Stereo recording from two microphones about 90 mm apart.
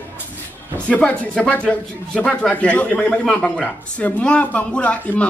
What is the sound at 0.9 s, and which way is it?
Speech, 15° left (ahead or behind).